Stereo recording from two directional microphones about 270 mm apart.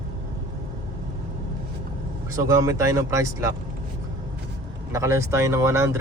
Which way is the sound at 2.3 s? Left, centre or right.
Centre.